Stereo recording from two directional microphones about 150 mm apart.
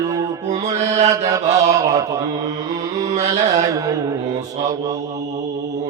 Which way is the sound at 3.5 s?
20° right (ahead or behind).